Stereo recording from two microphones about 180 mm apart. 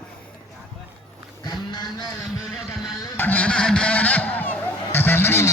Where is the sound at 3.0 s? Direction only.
10° left (ahead or behind).